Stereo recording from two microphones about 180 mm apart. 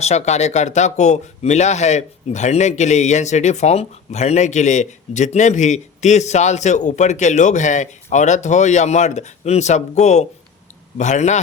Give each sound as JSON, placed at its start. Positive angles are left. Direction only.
{"t": 0.0, "sound": "a man's voice", "side_deg": 40}